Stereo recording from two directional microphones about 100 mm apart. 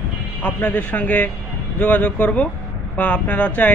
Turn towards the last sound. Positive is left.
turn(degrees=15)  # may be behind; listen again after turning